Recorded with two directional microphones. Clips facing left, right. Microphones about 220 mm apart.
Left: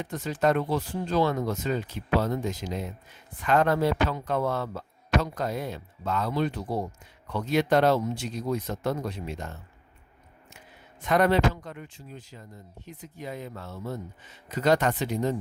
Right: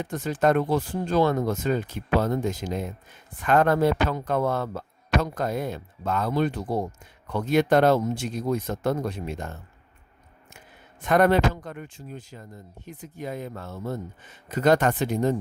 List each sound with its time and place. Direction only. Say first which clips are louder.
0.0 s a man's voice: right 2 dB; 50° right (ahead or behind)
11.0 s a man's voice: right 3 dB; 50° right (ahead or behind)